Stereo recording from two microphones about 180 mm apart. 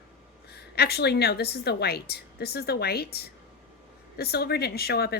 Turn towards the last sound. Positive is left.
turn(degrees=60)  # may be behind; listen again after turning